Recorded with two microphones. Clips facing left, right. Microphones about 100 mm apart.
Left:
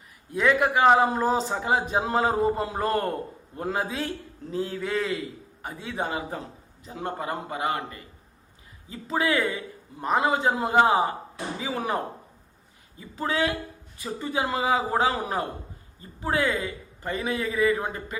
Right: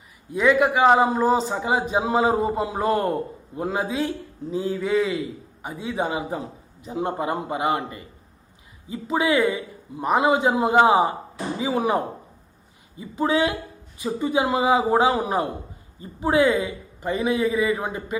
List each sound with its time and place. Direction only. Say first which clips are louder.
0.3 s a man's voice: right 4 dB; 5° right (ahead or behind)